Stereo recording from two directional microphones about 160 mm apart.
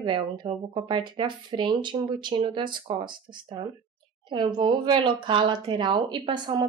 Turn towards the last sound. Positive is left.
turn(degrees=-30)  # may be behind; listen again after turning